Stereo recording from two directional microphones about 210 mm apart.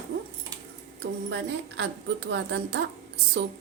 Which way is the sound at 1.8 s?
60° right (ahead or behind).